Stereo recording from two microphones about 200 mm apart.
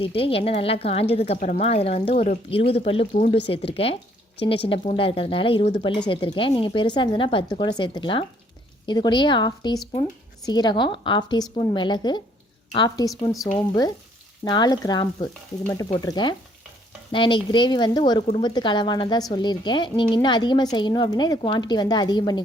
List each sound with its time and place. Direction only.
0.0 s a woman's voice: 30° left (ahead or behind)
14.4 s a woman's voice: 20° left (ahead or behind)